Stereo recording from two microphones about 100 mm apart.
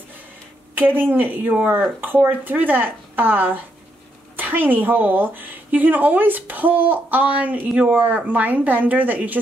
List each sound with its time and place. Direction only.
0.7 s a woman's voice: 20° right (ahead or behind)